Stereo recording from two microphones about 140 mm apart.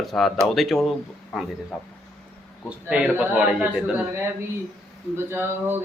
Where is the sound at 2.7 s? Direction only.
10° right (ahead or behind).